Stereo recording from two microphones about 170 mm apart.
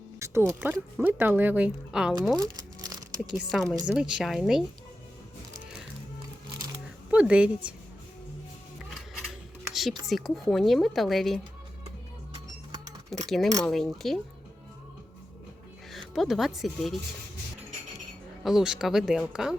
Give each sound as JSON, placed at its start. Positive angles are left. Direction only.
{"t": 0.2, "sound": "speech", "side_deg": -15}
{"t": 2.3, "sound": "crumpling", "side_deg": -20}
{"t": 3.5, "sound": "speech", "side_deg": 0}
{"t": 7.1, "sound": "a woman's voice", "side_deg": -5}
{"t": 9.7, "sound": "a sound", "side_deg": 0}
{"t": 10.1, "sound": "speech", "side_deg": 0}
{"t": 13.2, "sound": "speech", "side_deg": 0}
{"t": 15.9, "sound": "speech", "side_deg": 0}
{"t": 18.4, "sound": "speech", "side_deg": -5}